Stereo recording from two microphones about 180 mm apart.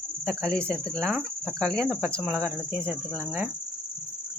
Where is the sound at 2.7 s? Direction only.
5° left (ahead or behind).